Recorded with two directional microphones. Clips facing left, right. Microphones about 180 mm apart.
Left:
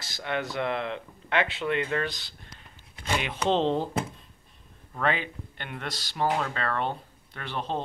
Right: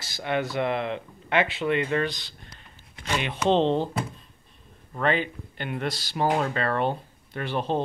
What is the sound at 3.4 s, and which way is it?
Speech, 15° right (ahead or behind).